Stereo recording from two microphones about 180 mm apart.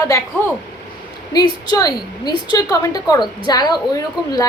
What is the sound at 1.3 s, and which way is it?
A woman's voice, 20° left (ahead or behind).